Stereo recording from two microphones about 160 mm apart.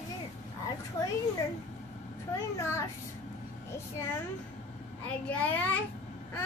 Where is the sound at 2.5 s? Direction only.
15° left (ahead or behind).